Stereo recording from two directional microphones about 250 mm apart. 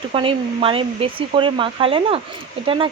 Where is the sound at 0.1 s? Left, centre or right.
Right.